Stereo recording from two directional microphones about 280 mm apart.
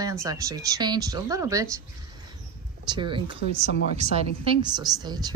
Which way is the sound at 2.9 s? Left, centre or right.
Centre.